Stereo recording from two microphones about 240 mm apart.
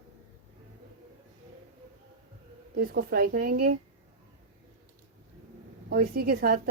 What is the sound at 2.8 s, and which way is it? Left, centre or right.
Speech, right.